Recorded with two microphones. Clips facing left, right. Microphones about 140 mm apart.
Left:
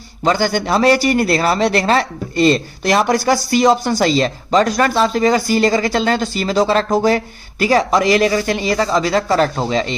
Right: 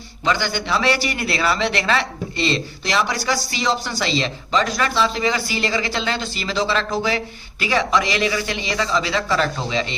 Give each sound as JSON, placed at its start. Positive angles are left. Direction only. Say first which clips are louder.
{"t": 0.3, "sound": "a man's voice", "louder": "left 6 dB", "side_deg": 40}